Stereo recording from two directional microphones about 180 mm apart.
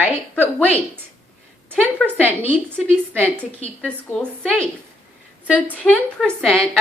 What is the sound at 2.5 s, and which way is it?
A woman's voice, 5° left (ahead or behind).